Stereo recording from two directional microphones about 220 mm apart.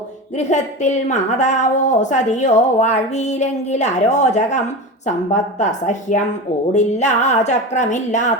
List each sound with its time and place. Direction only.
0.3 s a woman's voice: 30° left (ahead or behind)